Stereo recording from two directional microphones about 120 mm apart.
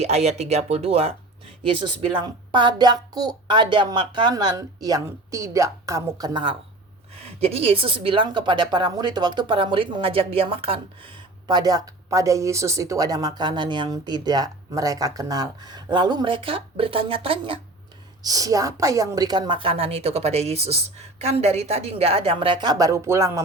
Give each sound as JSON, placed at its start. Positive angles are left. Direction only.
{"t": 0.0, "sound": "speech", "side_deg": -65}
{"t": 1.7, "sound": "a woman's voice", "side_deg": -45}
{"t": 7.3, "sound": "a woman's voice", "side_deg": -55}
{"t": 11.4, "sound": "a woman's voice", "side_deg": -35}
{"t": 18.2, "sound": "a woman's voice", "side_deg": -30}